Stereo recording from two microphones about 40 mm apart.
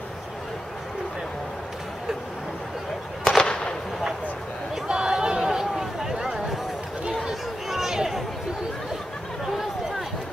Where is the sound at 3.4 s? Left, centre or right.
Centre.